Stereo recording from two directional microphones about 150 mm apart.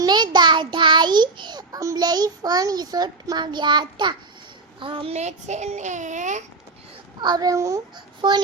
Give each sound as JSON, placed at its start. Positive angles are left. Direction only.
{"t": 0.0, "sound": "a child's voice", "side_deg": -30}
{"t": 7.2, "sound": "a child's voice", "side_deg": -25}